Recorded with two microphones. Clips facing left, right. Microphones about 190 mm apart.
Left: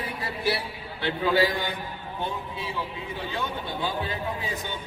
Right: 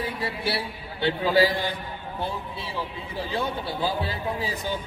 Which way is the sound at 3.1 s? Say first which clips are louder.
Right 4 dB; 35° right (ahead or behind).